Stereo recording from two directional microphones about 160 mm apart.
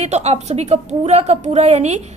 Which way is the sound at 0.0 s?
45° right (ahead or behind).